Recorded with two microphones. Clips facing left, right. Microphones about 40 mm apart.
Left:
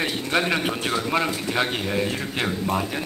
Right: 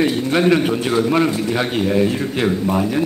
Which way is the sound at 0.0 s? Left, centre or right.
Centre.